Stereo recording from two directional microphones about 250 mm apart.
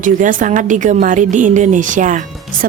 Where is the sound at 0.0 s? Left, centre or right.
Right.